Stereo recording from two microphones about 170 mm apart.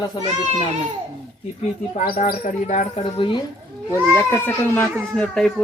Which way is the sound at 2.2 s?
45° left (ahead or behind).